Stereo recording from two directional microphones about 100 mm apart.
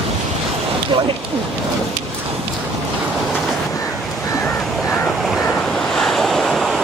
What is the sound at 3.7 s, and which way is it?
Waves, 35° left (ahead or behind).